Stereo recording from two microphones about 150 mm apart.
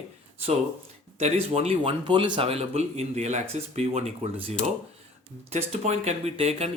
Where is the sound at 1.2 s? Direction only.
40° right (ahead or behind).